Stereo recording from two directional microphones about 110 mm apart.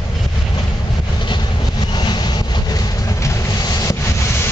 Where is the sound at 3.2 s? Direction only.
35° left (ahead or behind).